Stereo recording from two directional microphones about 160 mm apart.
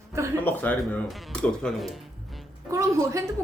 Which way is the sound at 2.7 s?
20° right (ahead or behind).